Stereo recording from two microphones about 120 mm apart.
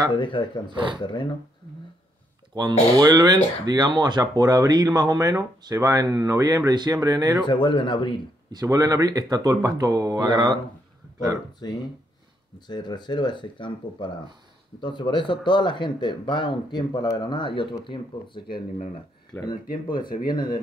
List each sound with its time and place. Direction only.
0.1 s speech: 45° left (ahead or behind)
0.7 s speech: 40° right (ahead or behind)
1.0 s speech: 40° left (ahead or behind)
2.5 s speech: 35° right (ahead or behind)
7.4 s speech: 40° left (ahead or behind)
8.5 s speech: 30° right (ahead or behind)
11.6 s speech: 35° left (ahead or behind)
19.4 s speech: 40° left (ahead or behind)